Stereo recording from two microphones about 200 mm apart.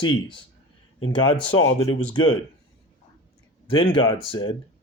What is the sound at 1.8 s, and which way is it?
Speech, 20° left (ahead or behind).